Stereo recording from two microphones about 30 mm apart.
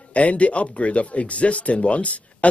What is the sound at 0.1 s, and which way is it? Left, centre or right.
A man's voice, left.